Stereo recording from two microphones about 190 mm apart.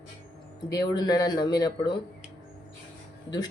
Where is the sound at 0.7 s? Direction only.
20° left (ahead or behind).